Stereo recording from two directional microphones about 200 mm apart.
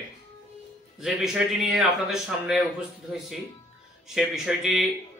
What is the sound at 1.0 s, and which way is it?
A man's voice, centre (ahead or behind).